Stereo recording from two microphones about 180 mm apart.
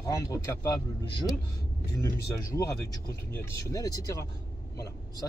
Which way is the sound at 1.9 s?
15° left (ahead or behind).